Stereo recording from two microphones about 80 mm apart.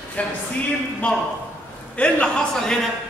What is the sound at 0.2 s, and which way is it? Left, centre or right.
A man's voice, centre.